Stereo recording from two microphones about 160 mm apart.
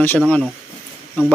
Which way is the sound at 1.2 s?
10° left (ahead or behind).